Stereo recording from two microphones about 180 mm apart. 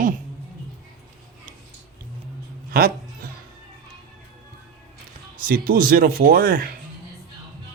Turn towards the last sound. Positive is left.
turn(degrees=-50)  # may be behind; listen again after turning